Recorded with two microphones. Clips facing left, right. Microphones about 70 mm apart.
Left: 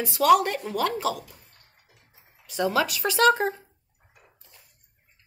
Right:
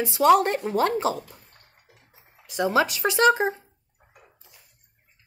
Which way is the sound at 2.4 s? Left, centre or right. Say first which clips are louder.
Right 2 dB; centre.